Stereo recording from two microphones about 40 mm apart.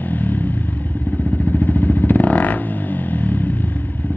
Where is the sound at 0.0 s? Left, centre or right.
Left.